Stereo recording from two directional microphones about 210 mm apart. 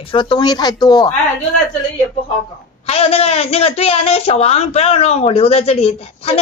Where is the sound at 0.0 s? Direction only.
25° left (ahead or behind).